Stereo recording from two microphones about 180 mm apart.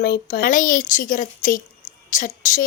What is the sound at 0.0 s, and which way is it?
A woman's voice, 60° left (ahead or behind).